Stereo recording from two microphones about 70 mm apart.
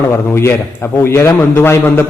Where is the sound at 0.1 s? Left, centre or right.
Left.